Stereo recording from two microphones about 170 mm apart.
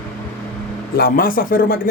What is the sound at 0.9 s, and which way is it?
Speech, 60° left (ahead or behind).